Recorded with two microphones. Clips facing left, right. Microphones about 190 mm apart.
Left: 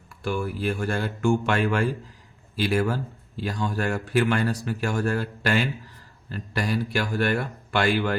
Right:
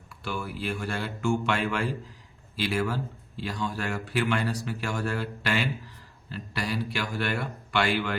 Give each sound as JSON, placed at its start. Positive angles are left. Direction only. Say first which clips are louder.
{"t": 0.1, "sound": "speech", "louder": "left 6 dB", "side_deg": 50}